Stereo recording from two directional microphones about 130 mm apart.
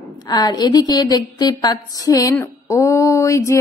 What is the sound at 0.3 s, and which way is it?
A woman's voice, 30° left (ahead or behind).